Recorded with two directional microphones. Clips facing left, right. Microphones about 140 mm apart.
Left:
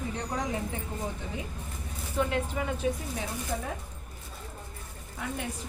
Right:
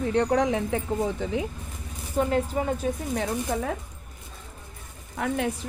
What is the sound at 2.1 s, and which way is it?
Speech, 40° right (ahead or behind).